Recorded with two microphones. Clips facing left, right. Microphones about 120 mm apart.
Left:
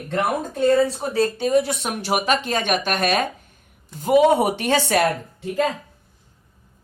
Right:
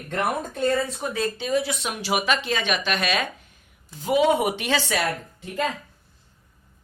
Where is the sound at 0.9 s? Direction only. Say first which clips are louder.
Left 5 dB; 35° left (ahead or behind); by 5.0 s 50° left (ahead or behind).